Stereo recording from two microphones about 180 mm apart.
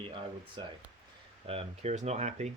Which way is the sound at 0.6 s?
25° right (ahead or behind).